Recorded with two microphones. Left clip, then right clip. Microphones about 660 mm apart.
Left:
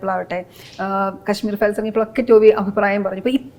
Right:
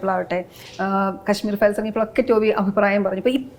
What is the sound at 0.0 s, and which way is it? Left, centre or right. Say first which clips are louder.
Speech: even; centre.